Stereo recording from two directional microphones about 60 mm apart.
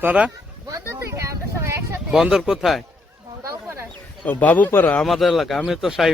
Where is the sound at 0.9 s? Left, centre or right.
Right.